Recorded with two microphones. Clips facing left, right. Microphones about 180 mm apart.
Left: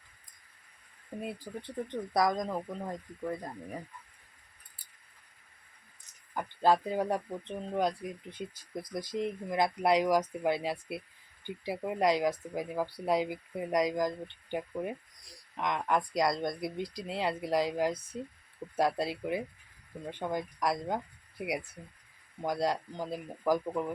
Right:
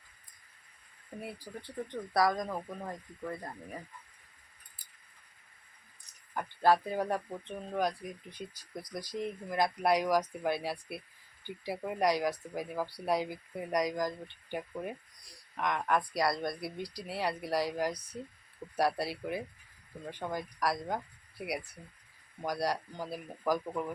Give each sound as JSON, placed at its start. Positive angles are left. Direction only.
{"t": 1.2, "sound": "speech", "side_deg": 20}
{"t": 6.3, "sound": "speech", "side_deg": 15}